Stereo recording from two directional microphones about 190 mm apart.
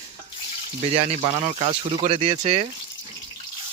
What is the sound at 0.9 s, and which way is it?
Speech, 30° right (ahead or behind).